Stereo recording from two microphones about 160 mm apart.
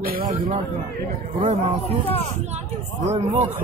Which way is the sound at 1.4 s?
40° right (ahead or behind).